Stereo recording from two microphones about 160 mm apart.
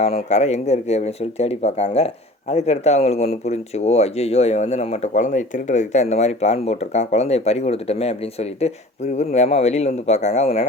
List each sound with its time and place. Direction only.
0.3 s speech: 45° left (ahead or behind)